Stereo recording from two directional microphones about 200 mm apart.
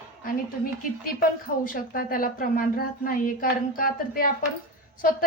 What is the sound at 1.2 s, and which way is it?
A woman's voice, 45° left (ahead or behind).